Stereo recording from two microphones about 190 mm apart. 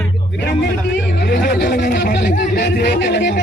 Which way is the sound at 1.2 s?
55° left (ahead or behind).